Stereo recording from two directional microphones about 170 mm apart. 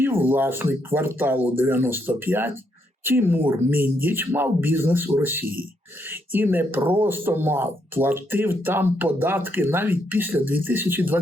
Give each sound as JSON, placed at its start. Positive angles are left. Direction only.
{"t": 0.0, "sound": "speech", "side_deg": -10}